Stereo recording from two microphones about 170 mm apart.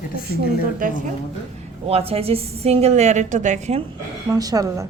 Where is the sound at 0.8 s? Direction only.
50° right (ahead or behind).